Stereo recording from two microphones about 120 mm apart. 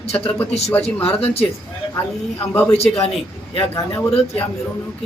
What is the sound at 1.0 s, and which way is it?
Speech, 55° left (ahead or behind).